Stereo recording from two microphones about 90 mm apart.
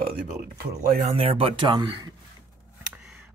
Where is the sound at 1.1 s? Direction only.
90° right.